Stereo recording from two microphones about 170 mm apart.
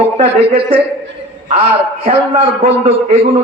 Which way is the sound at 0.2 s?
35° right (ahead or behind).